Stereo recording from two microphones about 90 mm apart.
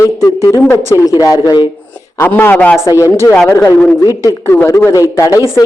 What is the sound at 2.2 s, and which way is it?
Speech, 25° left (ahead or behind).